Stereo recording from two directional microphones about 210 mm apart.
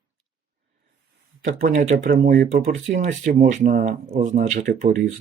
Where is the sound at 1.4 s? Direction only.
40° right (ahead or behind).